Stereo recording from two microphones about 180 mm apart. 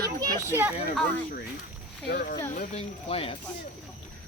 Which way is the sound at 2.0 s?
55° left (ahead or behind).